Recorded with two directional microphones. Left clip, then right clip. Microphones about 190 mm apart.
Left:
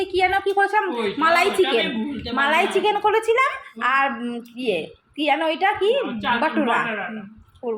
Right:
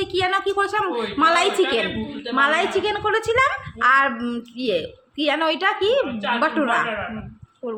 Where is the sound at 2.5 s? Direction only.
Centre (ahead or behind).